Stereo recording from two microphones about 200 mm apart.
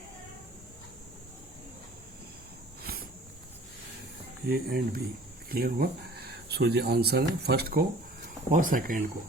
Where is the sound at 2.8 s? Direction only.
50° right (ahead or behind).